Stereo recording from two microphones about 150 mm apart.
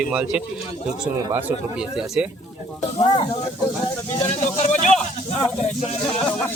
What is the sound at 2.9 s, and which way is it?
Speech, 35° left (ahead or behind).